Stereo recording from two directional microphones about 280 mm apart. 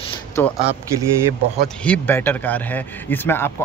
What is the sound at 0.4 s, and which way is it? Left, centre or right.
Speech, centre.